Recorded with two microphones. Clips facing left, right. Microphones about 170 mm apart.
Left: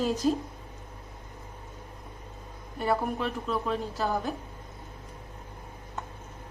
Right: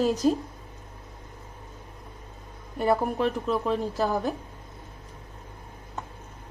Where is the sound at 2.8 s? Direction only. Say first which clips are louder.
Right 4 dB; 40° right (ahead or behind).